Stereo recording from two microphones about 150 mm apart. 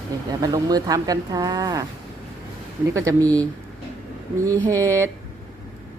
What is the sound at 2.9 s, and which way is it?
Speech, 20° right (ahead or behind).